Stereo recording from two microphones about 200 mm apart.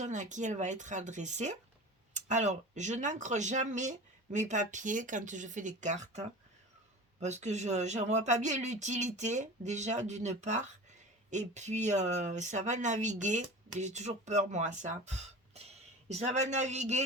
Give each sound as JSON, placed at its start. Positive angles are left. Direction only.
{"t": 0.0, "sound": "speech", "side_deg": -35}